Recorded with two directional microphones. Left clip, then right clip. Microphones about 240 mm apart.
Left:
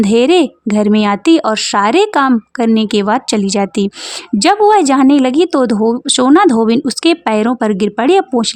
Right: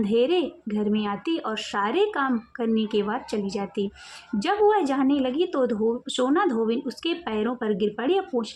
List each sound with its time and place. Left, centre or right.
0.0 s a woman's voice: left